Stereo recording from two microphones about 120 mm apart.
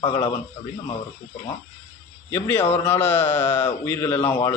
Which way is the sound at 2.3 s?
20° left (ahead or behind).